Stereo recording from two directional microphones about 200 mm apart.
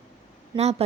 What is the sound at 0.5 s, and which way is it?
Speech, 20° right (ahead or behind).